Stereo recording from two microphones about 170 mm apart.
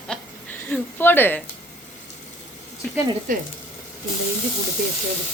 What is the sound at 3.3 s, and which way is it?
Frying, 50° right (ahead or behind).